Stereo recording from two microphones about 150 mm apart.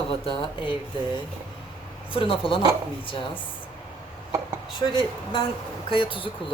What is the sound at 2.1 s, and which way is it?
Speech, 35° left (ahead or behind).